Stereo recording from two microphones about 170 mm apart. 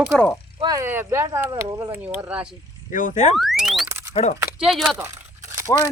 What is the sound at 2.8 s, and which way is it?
Speech, 50° left (ahead or behind).